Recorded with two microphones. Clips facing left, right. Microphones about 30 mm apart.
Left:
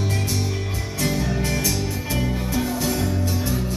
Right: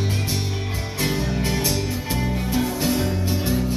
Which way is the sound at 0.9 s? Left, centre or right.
Right.